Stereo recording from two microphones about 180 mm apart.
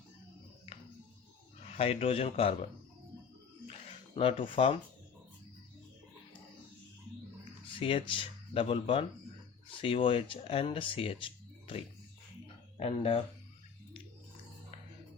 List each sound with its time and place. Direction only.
1.7 s speech: 35° left (ahead or behind)
3.7 s a sound: 30° left (ahead or behind)
7.7 s speech: 30° left (ahead or behind)
12.7 s speech: 30° left (ahead or behind)